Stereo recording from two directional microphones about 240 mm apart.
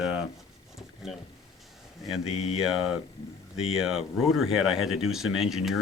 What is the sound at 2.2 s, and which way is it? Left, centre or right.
Mantra, left.